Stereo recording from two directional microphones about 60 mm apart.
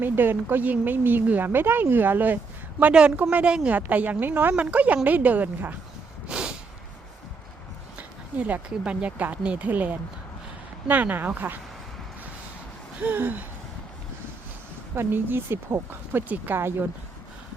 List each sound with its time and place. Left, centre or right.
0.0 s a woman's voice: right
3.3 s a woman's voice: centre; by 4.5 s right
4.5 s a woman's voice: right
6.2 s snort: centre
7.9 s a sound: right
8.8 s a woman's voice: centre
13.0 s a woman's voice: right
14.9 s a woman's voice: right